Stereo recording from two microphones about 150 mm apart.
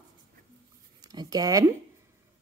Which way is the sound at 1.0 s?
25° right (ahead or behind).